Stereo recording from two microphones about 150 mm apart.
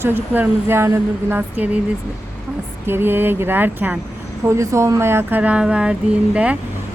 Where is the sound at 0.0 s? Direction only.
15° right (ahead or behind).